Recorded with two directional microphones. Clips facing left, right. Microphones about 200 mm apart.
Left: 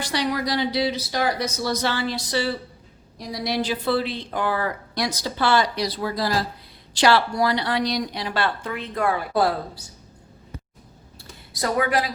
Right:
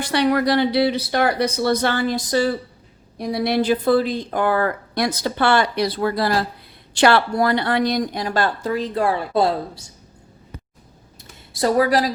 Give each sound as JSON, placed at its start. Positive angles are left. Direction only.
{"t": 0.1, "sound": "speech", "side_deg": -60}
{"t": 3.2, "sound": "a woman's voice", "side_deg": -55}
{"t": 11.2, "sound": "a sound", "side_deg": -30}